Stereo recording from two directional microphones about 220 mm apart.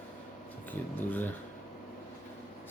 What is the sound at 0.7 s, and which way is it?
Speech, 10° left (ahead or behind).